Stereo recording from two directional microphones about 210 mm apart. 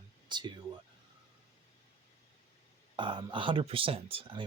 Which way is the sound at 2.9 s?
20° right (ahead or behind).